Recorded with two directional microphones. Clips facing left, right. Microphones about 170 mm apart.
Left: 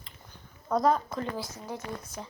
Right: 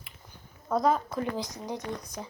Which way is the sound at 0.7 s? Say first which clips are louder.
Even; centre (ahead or behind).